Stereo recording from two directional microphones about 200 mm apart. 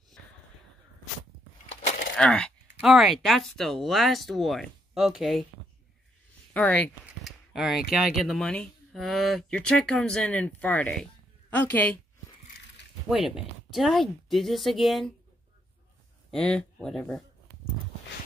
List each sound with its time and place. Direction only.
1.7 s a sound: 35° left (ahead or behind)
2.1 s speech: 5° left (ahead or behind)
6.5 s a woman's voice: 5° left (ahead or behind)
7.1 s a sound: centre (ahead or behind)
7.9 s a woman's voice: centre (ahead or behind)
13.1 s speech: 5° right (ahead or behind)
16.3 s speech: 5° left (ahead or behind)